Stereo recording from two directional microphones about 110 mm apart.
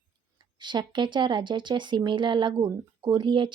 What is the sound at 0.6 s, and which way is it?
Speech, 45° right (ahead or behind).